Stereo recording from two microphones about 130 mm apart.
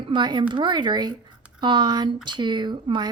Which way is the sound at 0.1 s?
35° right (ahead or behind).